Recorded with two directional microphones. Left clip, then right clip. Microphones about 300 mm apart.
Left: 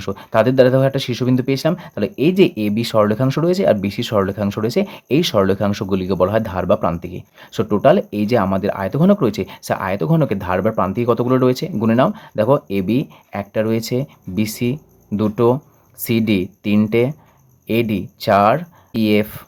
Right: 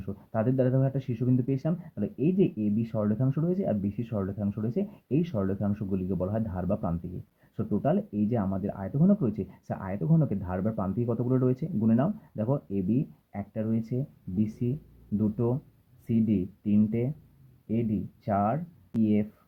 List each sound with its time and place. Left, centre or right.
0.0 s speech: left
18.3 s speech: left